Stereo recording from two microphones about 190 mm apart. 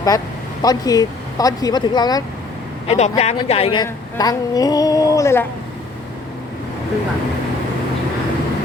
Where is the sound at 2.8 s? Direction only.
35° left (ahead or behind); by 5.5 s 15° left (ahead or behind).